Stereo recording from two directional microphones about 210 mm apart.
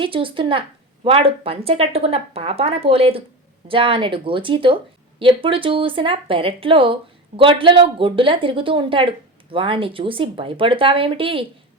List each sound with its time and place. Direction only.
0.0 s speech: 25° right (ahead or behind)